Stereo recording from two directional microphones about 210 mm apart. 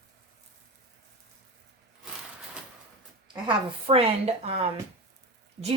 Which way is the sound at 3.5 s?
25° right (ahead or behind).